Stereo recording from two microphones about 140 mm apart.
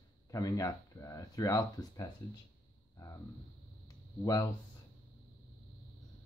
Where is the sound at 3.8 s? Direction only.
25° left (ahead or behind).